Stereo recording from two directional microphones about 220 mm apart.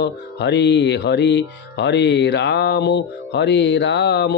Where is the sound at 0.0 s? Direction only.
50° left (ahead or behind).